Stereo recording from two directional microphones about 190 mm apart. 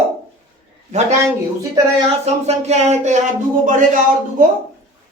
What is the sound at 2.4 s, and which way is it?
Speech, 35° right (ahead or behind).